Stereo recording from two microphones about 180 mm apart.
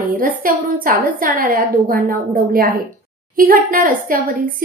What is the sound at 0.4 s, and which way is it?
A woman's voice, 50° right (ahead or behind).